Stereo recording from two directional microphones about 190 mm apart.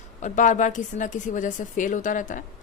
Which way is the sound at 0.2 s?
40° left (ahead or behind).